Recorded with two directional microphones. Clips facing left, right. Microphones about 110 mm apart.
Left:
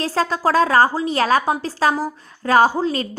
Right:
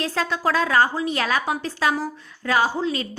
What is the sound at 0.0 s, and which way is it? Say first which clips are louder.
A woman's voice: left 4 dB; 35° left (ahead or behind).